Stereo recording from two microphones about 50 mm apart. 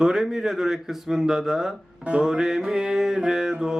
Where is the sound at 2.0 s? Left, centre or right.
Right.